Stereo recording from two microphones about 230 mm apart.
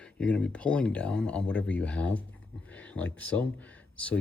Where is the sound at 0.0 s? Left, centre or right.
Centre.